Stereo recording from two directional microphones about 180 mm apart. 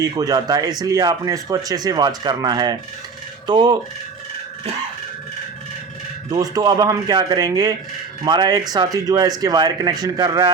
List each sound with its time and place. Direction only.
0.0 s speech: 20° right (ahead or behind)
6.3 s speech: 20° right (ahead or behind)